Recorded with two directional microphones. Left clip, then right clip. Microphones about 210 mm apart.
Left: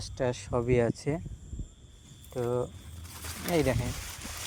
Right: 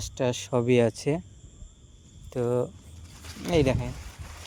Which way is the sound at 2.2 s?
50° right (ahead or behind).